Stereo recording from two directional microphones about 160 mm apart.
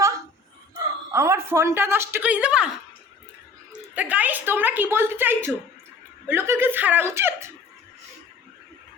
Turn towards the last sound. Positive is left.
turn(degrees=-15)  # may be behind; listen again after turning